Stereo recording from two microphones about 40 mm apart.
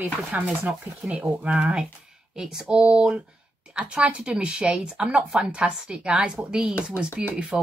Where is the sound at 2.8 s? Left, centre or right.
Right.